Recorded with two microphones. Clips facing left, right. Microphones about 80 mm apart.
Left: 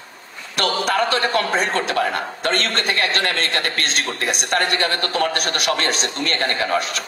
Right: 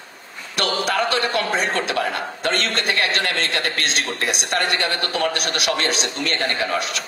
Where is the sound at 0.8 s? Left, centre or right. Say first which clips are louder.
Left 1 dB; left.